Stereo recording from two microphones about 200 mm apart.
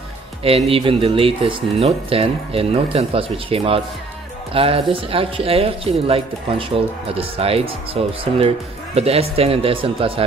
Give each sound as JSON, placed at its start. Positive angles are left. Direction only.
{"t": 0.4, "sound": "speech", "side_deg": -30}